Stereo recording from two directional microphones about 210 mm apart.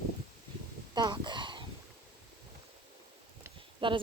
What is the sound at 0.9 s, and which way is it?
Speech, 20° right (ahead or behind).